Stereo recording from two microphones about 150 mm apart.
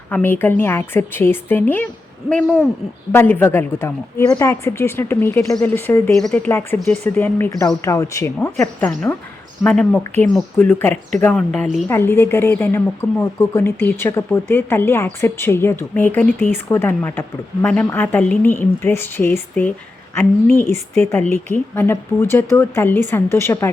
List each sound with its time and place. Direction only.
0.1 s a woman's voice: 15° left (ahead or behind)
3.1 s a woman's voice: 15° left (ahead or behind)
6.1 s a woman's voice: 5° left (ahead or behind); by 9.0 s 20° left (ahead or behind)
9.6 s a woman's voice: 5° left (ahead or behind)
11.9 s a woman's voice: 15° left (ahead or behind)
20.7 s speech: 45° right (ahead or behind)
21.1 s a woman's voice: 15° left (ahead or behind)